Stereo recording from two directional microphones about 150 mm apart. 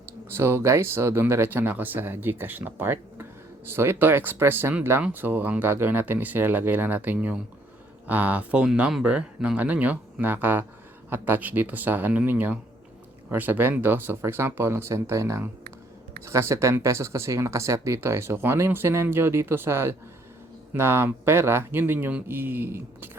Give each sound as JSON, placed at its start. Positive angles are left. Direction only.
{"t": 0.3, "sound": "speech", "side_deg": -15}